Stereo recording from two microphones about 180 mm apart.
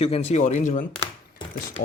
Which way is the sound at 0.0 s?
35° left (ahead or behind).